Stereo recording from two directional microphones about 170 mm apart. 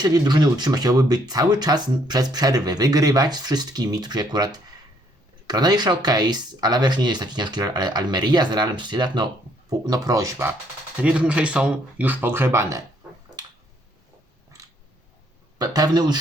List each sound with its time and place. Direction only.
0.0 s speech: 25° right (ahead or behind)
15.5 s speech: 20° right (ahead or behind)